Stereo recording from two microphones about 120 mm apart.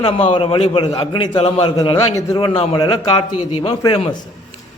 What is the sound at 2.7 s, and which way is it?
A man's voice, 40° left (ahead or behind).